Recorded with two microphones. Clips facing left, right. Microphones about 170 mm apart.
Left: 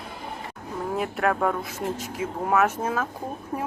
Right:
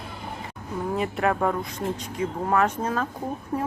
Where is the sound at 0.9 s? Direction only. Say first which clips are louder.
Even; centre (ahead or behind).